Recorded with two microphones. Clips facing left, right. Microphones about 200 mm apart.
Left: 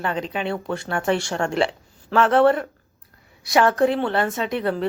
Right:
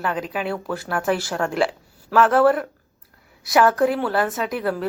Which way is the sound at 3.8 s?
25° left (ahead or behind).